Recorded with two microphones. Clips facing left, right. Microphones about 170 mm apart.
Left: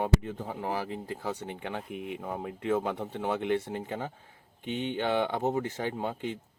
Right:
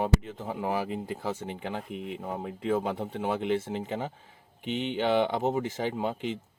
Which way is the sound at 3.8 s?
15° right (ahead or behind).